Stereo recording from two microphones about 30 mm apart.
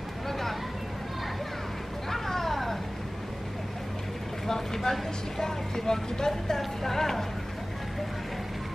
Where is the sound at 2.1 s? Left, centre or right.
Centre.